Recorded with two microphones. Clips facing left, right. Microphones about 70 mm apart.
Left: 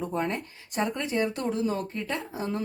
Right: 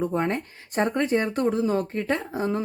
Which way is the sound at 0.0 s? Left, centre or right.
Right.